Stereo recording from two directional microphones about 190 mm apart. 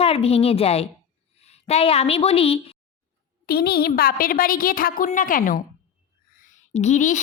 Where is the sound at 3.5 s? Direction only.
55° left (ahead or behind).